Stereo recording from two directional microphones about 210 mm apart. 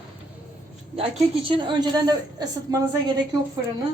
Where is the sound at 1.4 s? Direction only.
20° right (ahead or behind).